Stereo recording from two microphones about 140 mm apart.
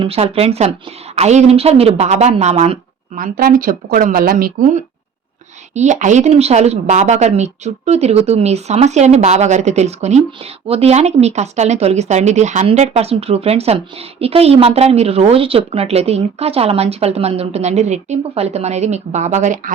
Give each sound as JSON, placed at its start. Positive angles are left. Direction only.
{"t": 0.0, "sound": "speech", "side_deg": -45}
{"t": 3.2, "sound": "speech", "side_deg": -85}
{"t": 5.7, "sound": "speech", "side_deg": -55}